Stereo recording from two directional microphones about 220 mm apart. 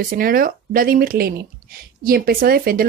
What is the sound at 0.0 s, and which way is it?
Speech, 40° right (ahead or behind).